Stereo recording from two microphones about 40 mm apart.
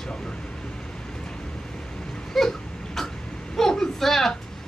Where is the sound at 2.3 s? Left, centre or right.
Centre.